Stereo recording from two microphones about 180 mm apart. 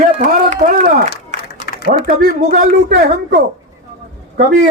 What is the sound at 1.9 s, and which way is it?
Speech, 50° right (ahead or behind).